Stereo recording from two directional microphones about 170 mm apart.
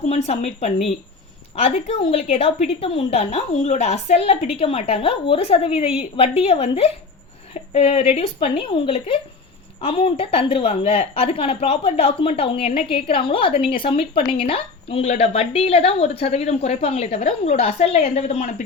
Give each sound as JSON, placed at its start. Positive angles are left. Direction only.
{"t": 0.1, "sound": "a woman's voice", "side_deg": 40}